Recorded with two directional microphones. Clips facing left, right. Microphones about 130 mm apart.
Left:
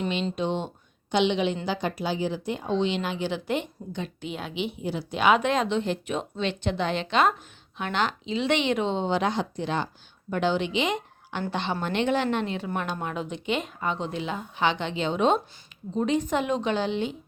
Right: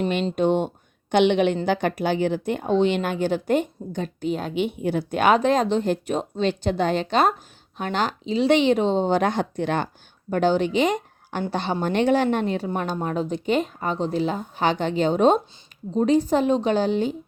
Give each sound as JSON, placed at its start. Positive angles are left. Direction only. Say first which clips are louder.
{"t": 0.3, "sound": "a woman's voice", "louder": "right 7 dB", "side_deg": -50}
{"t": 10.3, "sound": "a woman's voice", "louder": "right 5 dB", "side_deg": -45}